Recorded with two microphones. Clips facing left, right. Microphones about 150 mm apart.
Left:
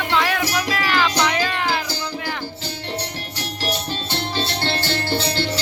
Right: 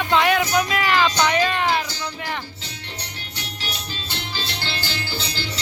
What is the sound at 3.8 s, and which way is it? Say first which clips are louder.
Music: left 7 dB; 65° left (ahead or behind).